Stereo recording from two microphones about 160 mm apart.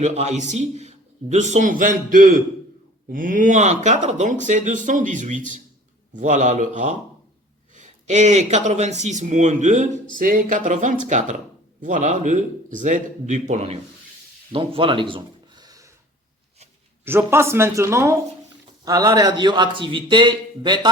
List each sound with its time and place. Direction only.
0.0 s speech: 45° right (ahead or behind)
14.5 s a sound: 35° right (ahead or behind)
17.1 s a man's voice: 15° right (ahead or behind)